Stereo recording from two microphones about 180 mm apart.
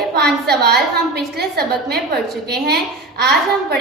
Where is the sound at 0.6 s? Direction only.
65° right (ahead or behind).